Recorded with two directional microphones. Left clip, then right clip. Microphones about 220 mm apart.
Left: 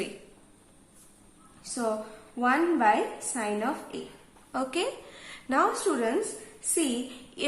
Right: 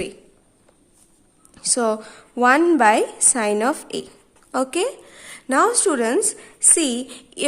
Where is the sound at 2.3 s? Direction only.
50° right (ahead or behind).